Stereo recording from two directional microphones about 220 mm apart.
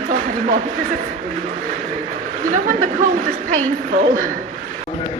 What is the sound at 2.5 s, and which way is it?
Speech, 35° right (ahead or behind).